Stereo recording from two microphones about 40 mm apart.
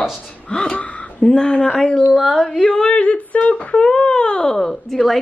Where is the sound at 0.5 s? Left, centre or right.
Centre.